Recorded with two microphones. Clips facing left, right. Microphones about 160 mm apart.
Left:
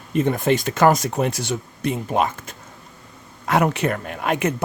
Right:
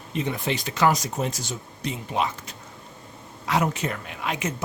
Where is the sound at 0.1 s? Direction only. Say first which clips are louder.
Left 8 dB; 50° left (ahead or behind).